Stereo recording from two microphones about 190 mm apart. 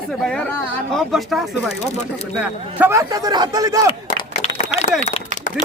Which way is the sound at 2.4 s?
10° right (ahead or behind).